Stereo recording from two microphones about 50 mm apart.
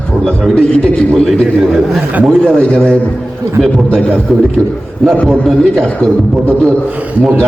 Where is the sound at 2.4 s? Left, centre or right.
Centre.